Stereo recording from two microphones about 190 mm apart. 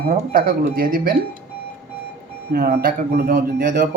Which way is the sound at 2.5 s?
50° right (ahead or behind).